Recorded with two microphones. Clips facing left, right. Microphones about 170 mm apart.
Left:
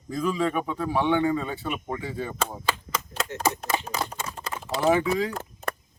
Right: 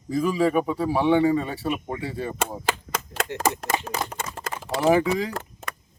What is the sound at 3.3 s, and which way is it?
Speech, 70° right (ahead or behind).